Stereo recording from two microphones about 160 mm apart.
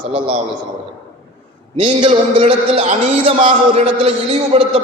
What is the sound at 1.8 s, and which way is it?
A man's voice, 35° right (ahead or behind).